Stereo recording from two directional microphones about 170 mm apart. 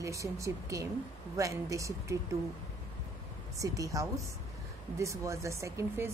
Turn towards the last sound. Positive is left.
turn(degrees=-15)  # may be behind; listen again after turning